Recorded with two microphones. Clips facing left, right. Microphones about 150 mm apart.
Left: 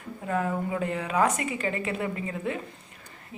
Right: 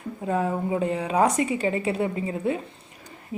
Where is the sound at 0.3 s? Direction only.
25° right (ahead or behind).